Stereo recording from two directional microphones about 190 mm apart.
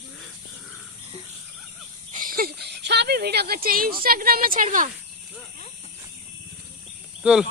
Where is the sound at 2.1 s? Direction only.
45° right (ahead or behind).